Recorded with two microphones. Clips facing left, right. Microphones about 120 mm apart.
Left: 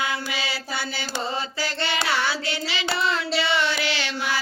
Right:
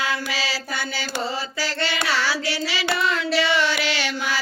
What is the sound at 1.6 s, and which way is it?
Child singing, 25° left (ahead or behind).